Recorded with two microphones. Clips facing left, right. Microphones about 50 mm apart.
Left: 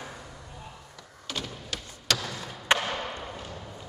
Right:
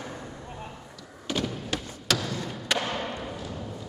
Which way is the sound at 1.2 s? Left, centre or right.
Centre.